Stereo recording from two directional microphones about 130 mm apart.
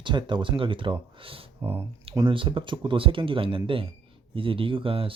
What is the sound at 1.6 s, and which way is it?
Speech, 20° right (ahead or behind).